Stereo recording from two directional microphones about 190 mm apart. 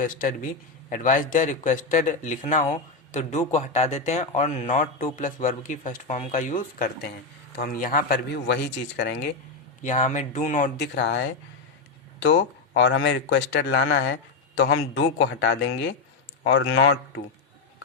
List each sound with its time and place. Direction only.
0.0 s a man's voice: 45° left (ahead or behind)
8.3 s speech: 70° left (ahead or behind)
9.8 s a man's voice: 40° left (ahead or behind)
10.9 s speech: 65° left (ahead or behind)
12.2 s speech: 90° left; by 16.0 s 70° left (ahead or behind)
16.4 s speech: 90° left